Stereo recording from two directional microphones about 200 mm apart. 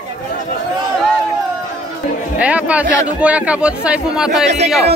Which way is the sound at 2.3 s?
5° right (ahead or behind).